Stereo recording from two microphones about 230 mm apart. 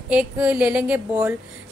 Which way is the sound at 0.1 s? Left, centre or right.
Centre.